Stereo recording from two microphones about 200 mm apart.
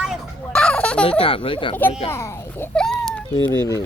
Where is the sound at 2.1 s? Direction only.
15° left (ahead or behind).